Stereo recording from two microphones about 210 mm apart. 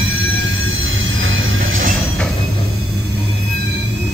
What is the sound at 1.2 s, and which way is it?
Music, 70° right (ahead or behind).